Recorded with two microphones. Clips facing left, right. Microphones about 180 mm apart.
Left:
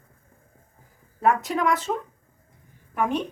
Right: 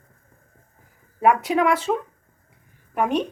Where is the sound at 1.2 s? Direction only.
10° right (ahead or behind).